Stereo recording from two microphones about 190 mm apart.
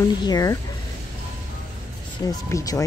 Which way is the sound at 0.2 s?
20° left (ahead or behind).